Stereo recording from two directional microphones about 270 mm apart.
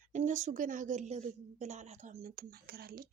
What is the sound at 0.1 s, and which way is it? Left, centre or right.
A woman's voice, right.